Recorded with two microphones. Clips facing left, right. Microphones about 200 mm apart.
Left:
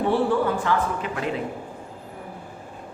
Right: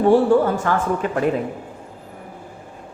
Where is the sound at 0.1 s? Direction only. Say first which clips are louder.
Right 7 dB; 45° right (ahead or behind).